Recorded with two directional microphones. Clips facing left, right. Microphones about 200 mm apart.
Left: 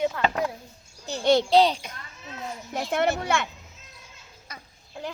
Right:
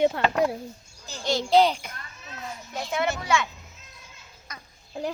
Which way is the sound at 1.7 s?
20° left (ahead or behind).